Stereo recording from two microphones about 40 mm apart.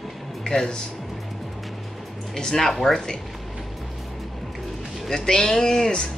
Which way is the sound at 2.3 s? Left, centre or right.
Centre.